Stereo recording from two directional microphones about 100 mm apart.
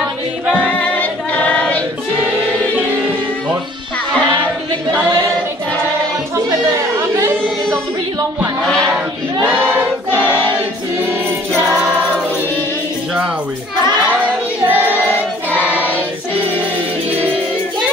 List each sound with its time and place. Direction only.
0.7 s choir: 15° left (ahead or behind)
14.6 s child singing: 20° right (ahead or behind)